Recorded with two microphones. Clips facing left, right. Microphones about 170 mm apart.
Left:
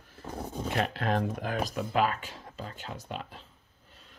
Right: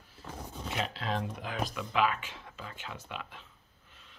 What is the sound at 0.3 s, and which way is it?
Speech, 55° left (ahead or behind).